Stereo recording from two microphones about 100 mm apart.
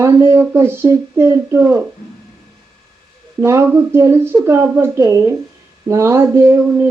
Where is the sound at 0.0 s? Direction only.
25° right (ahead or behind).